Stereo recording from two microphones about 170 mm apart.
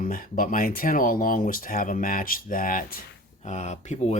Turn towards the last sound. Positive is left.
turn(degrees=45)  # may be behind; listen again after turning